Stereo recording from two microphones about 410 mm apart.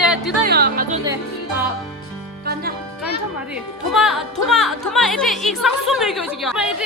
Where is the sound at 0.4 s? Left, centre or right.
Right.